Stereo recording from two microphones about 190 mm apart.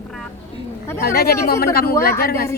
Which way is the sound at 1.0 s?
55° left (ahead or behind).